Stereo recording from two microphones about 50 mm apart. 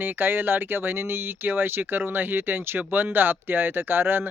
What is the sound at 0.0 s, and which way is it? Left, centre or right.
Speech, right.